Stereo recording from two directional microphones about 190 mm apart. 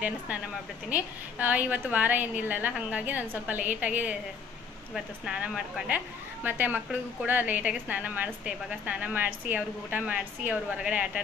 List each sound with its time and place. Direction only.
0.8 s a woman's voice: 10° right (ahead or behind)